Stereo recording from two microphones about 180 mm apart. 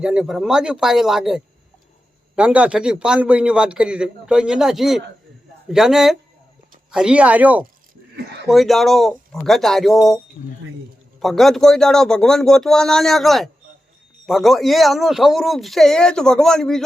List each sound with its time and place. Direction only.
0.0 s a man's voice: 5° right (ahead or behind)
10.4 s speech: 40° left (ahead or behind)
11.2 s a man's voice: centre (ahead or behind)